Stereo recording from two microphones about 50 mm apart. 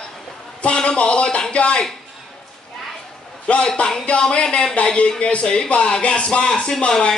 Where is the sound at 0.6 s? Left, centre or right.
Centre.